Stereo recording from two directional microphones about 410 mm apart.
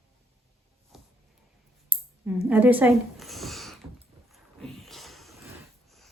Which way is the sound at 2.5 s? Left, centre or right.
Centre.